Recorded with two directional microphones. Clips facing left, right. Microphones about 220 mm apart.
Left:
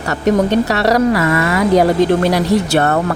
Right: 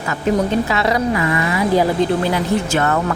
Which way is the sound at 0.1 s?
75° left (ahead or behind).